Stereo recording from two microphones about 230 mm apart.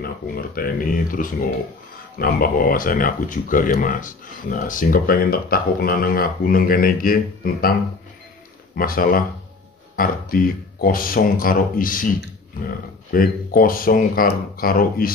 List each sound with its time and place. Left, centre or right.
0.0 s speech: left
8.7 s speech: left
13.1 s speech: left